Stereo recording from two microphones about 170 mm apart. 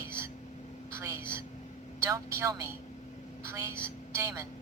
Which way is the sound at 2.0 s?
15° right (ahead or behind).